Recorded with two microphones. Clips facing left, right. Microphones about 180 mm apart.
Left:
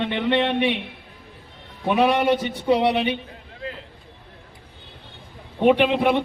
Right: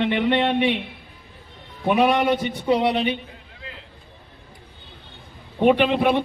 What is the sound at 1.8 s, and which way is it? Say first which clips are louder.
Speech: right 1 dB; 15° right (ahead or behind).